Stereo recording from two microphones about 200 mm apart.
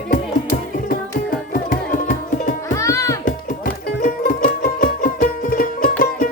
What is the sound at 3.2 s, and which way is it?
Music, 45° left (ahead or behind).